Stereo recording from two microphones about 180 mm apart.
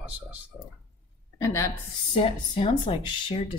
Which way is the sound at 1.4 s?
15° left (ahead or behind).